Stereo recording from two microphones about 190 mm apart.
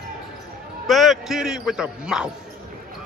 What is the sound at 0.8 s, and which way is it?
A man's voice, centre (ahead or behind).